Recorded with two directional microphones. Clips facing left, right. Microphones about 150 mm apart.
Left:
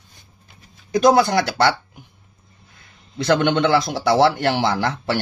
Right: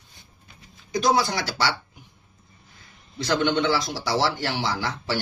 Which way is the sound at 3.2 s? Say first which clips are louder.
Left 5 dB; 60° left (ahead or behind).